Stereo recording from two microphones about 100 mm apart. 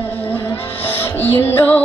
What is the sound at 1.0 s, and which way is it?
Music, 20° left (ahead or behind).